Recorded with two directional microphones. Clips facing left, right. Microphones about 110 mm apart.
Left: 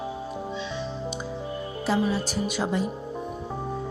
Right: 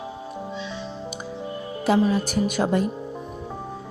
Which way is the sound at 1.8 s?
60° right (ahead or behind).